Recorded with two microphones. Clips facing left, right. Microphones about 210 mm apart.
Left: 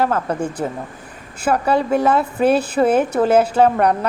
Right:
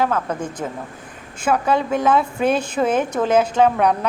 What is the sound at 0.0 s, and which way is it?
A woman's voice, 10° left (ahead or behind).